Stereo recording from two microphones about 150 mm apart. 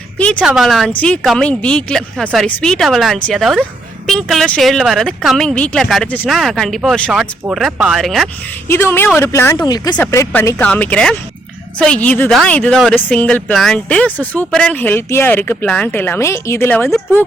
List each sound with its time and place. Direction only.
0.2 s speech: 10° left (ahead or behind)
0.4 s speech: centre (ahead or behind)
8.6 s speech: 15° left (ahead or behind)
10.0 s speech: 15° left (ahead or behind)